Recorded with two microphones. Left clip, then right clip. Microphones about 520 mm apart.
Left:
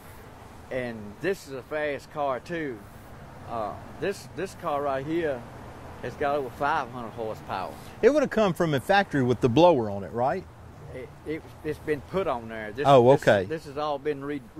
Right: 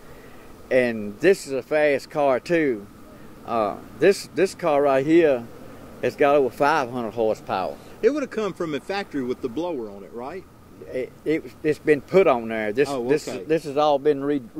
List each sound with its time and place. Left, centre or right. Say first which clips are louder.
0.7 s speech: right 12 dB; right
8.0 s speech: left 1 dB; left
9.8 s speech: left 7 dB; left
11.0 s speech: right 10 dB; right
12.8 s speech: left 8 dB; left
13.5 s speech: right 10 dB; right